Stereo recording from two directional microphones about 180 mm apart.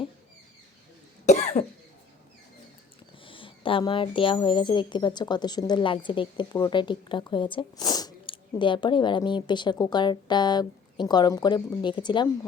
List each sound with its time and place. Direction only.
1.2 s cough: 40° left (ahead or behind)
3.2 s speech: 30° left (ahead or behind)